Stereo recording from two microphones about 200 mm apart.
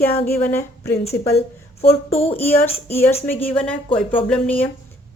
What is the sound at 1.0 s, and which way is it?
Speech, 30° left (ahead or behind).